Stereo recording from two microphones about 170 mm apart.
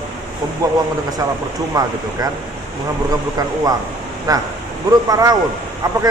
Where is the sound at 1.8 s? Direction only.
20° right (ahead or behind).